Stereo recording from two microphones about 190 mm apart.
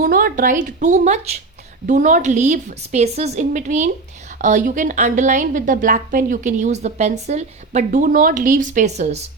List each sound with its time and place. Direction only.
0.0 s a woman's voice: 50° right (ahead or behind)